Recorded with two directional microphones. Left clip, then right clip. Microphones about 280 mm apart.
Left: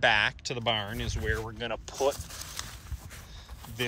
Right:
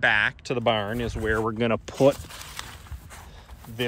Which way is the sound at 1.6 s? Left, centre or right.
Centre.